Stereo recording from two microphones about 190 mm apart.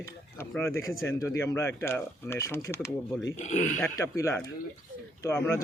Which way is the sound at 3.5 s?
40° left (ahead or behind).